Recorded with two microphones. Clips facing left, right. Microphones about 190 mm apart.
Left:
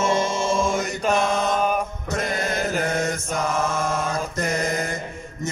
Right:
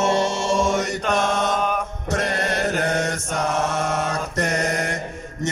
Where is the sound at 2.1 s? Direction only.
75° right (ahead or behind).